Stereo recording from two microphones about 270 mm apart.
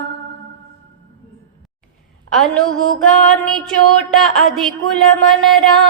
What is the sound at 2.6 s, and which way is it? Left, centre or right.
Mantra, right.